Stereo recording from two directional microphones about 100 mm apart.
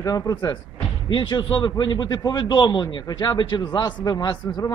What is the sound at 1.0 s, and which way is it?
A man's voice, 50° left (ahead or behind).